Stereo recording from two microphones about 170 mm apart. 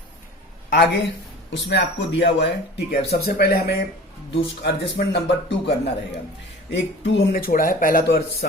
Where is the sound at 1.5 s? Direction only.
90° left; by 3.8 s 60° left (ahead or behind).